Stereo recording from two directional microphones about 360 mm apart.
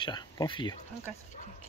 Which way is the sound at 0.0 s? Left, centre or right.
Centre.